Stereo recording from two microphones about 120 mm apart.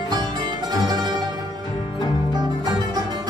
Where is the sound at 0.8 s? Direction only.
35° right (ahead or behind).